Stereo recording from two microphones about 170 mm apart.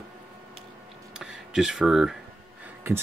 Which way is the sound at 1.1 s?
5° right (ahead or behind).